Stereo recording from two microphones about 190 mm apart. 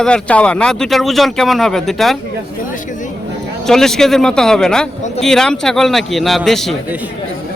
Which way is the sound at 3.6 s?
Centre (ahead or behind).